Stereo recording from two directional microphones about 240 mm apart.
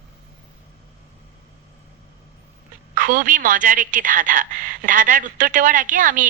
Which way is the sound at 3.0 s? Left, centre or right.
Right.